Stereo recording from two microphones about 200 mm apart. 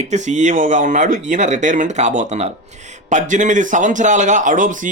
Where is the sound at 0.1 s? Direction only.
35° right (ahead or behind).